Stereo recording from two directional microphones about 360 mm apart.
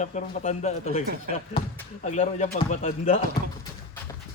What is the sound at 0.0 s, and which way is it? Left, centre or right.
Speech, centre.